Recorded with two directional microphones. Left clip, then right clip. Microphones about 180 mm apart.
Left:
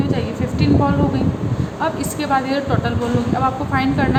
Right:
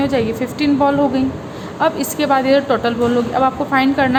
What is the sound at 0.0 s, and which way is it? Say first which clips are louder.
A woman's voice: right 5 dB; 45° right (ahead or behind).